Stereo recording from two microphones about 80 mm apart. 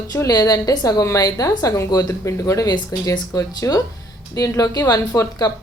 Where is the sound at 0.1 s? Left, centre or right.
Left.